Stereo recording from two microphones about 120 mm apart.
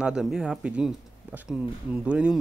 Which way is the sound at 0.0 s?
5° right (ahead or behind).